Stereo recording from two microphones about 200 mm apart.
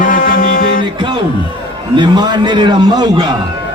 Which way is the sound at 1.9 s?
20° right (ahead or behind).